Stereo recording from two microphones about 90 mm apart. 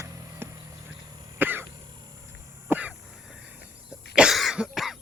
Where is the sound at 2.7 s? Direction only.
15° right (ahead or behind).